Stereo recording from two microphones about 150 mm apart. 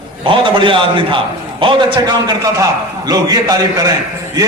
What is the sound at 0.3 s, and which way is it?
A man's voice, 35° right (ahead or behind).